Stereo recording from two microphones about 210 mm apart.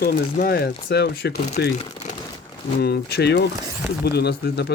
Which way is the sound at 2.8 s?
50° left (ahead or behind).